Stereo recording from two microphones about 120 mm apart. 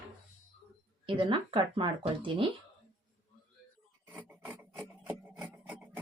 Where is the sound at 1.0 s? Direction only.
45° right (ahead or behind).